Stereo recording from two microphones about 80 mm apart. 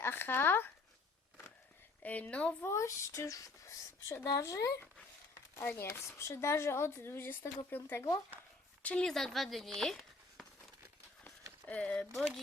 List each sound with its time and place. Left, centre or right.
0.0 s a woman's voice: left
2.0 s a woman's voice: left
2.6 s speech: left
5.5 s speech: left
9.0 s speech: centre
11.6 s speech: centre